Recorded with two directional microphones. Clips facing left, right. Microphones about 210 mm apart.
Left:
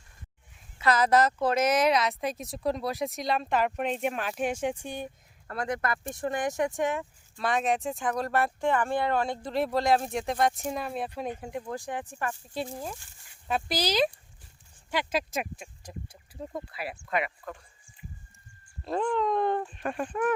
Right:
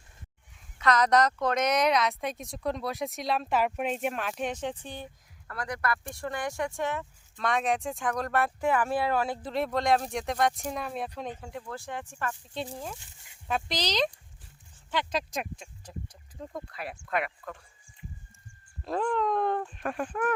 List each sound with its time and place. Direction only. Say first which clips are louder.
0.8 s a woman's voice: left 1 dB; 5° left (ahead or behind)
5.5 s speech: left 2 dB; 25° left (ahead or behind)
7.3 s a woman's voice: left 1 dB; centre (ahead or behind)
11.2 s speech: left 3 dB; 15° left (ahead or behind)
12.7 s a woman's voice: left 2 dB; 5° left (ahead or behind)
18.9 s a woman's voice: left 1 dB; centre (ahead or behind)